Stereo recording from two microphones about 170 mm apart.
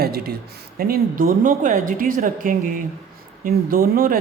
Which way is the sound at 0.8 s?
60° right (ahead or behind).